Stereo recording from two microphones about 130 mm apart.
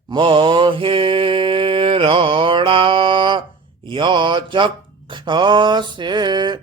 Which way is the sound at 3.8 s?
40° right (ahead or behind).